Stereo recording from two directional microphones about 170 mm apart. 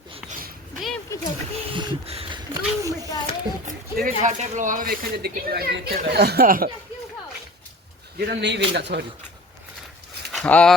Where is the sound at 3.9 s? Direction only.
50° right (ahead or behind).